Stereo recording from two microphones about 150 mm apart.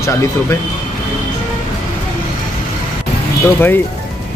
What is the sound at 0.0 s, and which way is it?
Speech, 20° left (ahead or behind).